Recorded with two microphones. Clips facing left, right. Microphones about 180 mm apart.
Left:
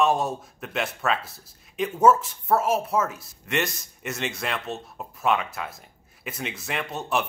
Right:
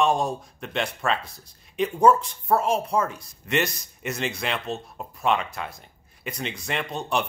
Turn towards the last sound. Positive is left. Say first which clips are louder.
# even
turn(degrees=5)  # may be behind; listen again after turning